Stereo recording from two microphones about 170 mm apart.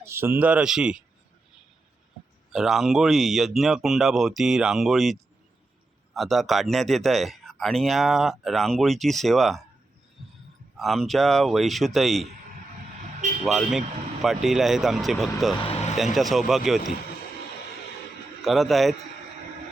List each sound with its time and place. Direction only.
0.0 s speech: 15° right (ahead or behind)
2.5 s speech: centre (ahead or behind)
6.1 s speech: centre (ahead or behind)
10.8 s speech: centre (ahead or behind)
13.4 s speech: centre (ahead or behind)
15.6 s a sound: 35° left (ahead or behind)
16.1 s speech: centre (ahead or behind)
18.4 s speech: centre (ahead or behind)